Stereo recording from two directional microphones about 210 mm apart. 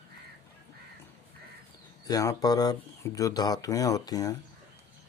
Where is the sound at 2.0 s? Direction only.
15° left (ahead or behind).